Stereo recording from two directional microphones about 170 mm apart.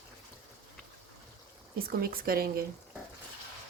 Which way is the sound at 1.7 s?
60° right (ahead or behind).